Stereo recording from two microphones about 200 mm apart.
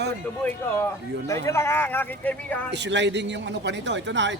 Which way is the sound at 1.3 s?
15° left (ahead or behind).